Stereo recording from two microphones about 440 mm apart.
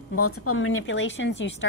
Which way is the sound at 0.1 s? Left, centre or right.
Left.